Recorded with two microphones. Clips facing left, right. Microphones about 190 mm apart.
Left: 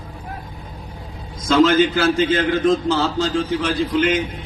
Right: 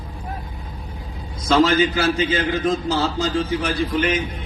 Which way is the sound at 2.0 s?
55° left (ahead or behind).